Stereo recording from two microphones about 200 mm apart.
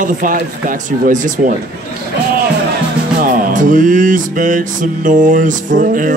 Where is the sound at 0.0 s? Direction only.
40° right (ahead or behind).